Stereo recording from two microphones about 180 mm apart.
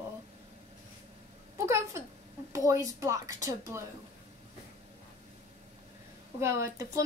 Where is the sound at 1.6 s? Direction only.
15° right (ahead or behind).